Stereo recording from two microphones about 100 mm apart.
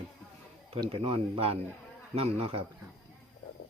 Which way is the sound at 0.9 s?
65° right (ahead or behind).